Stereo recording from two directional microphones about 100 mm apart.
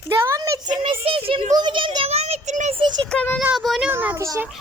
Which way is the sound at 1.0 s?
65° right (ahead or behind).